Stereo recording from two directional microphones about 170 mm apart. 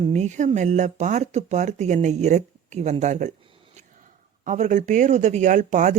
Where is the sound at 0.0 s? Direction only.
40° right (ahead or behind).